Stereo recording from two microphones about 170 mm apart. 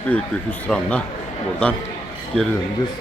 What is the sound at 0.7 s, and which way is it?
Speech, 5° left (ahead or behind).